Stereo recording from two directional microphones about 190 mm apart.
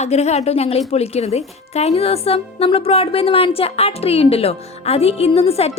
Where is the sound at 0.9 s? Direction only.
35° left (ahead or behind).